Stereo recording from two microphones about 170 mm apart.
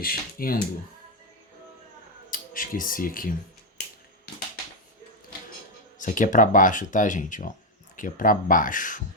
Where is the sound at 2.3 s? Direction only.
55° left (ahead or behind).